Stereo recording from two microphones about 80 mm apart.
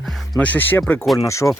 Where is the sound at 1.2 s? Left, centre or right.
Left.